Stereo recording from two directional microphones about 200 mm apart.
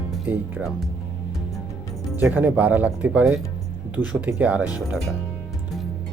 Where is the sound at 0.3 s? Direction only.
10° right (ahead or behind).